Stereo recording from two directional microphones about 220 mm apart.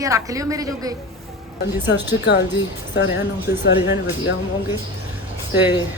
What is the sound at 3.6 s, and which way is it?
Speech, 55° left (ahead or behind).